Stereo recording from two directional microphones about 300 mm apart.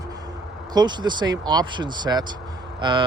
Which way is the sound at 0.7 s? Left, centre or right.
Centre.